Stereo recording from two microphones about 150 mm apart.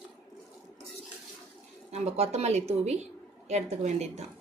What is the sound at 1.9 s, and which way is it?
A woman's voice, 45° right (ahead or behind).